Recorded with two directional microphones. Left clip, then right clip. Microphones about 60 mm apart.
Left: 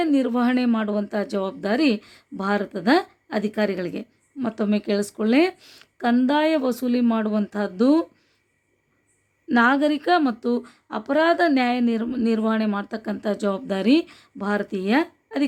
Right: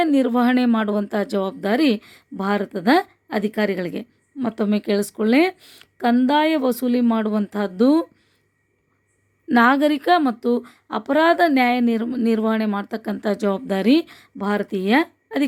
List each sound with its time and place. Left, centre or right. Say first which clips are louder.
0.0 s speech: right 3 dB; right
1.5 s speech: right 1 dB; right
5.5 s a woman's voice: right 1 dB; centre
5.8 s a sound: right 3 dB; right
6.2 s speech: right 2 dB; right
9.5 s speech: right 3 dB; right
11.4 s speech: right 3 dB; right
13.2 s speech: right 3 dB; right